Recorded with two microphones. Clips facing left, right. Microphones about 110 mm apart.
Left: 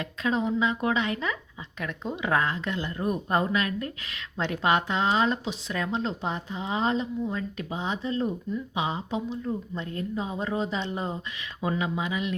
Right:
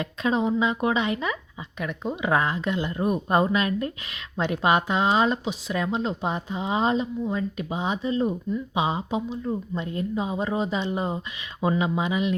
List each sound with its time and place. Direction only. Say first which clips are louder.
0.0 s a woman's voice: right 3 dB; 20° right (ahead or behind)
11.6 s speech: right 4 dB; 20° right (ahead or behind)